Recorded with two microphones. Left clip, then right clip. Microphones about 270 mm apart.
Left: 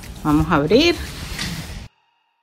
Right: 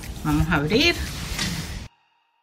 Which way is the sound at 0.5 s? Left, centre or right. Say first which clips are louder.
Left 4 dB; centre.